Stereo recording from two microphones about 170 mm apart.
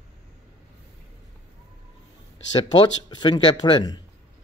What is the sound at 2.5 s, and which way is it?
Speech, 25° left (ahead or behind).